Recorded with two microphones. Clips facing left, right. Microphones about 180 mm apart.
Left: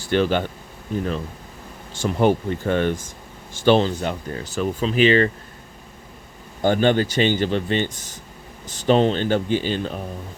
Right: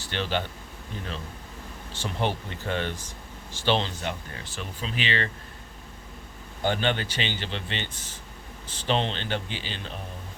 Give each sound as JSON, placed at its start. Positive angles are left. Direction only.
{"t": 0.1, "sound": "speech", "side_deg": 50}
{"t": 1.9, "sound": "speech", "side_deg": 45}
{"t": 6.6, "sound": "speech", "side_deg": 45}